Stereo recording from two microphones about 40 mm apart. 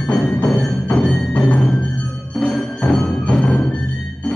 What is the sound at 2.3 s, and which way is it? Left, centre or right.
Music, centre.